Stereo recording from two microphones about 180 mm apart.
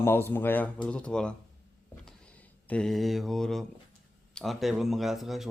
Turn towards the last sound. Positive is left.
turn(degrees=0)  # may be behind; listen again after turning